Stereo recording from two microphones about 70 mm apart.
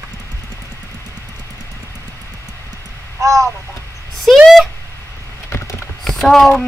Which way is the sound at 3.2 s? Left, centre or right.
Right.